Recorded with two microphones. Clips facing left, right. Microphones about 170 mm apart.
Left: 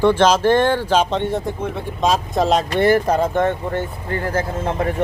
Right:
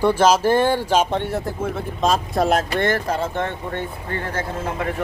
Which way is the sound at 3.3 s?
40° left (ahead or behind).